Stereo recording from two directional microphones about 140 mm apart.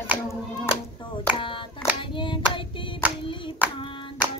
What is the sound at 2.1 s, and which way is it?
Hands, 35° left (ahead or behind).